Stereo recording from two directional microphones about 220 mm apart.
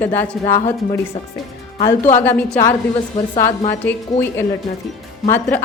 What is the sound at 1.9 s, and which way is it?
A woman's voice, 10° left (ahead or behind).